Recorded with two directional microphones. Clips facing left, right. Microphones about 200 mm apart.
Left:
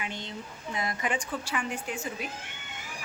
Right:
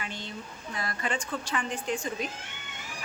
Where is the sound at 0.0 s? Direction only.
20° left (ahead or behind).